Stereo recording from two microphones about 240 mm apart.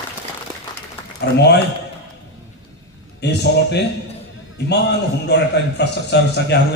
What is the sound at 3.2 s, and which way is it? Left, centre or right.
A man's voice, left.